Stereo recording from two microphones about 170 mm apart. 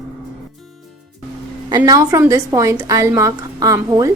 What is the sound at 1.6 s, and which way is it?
A woman's voice, 20° right (ahead or behind).